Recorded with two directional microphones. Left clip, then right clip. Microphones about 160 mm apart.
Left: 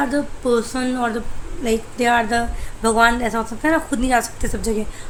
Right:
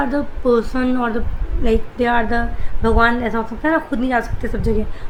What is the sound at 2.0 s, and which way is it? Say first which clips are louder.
A woman's voice: left 3 dB; 20° left (ahead or behind).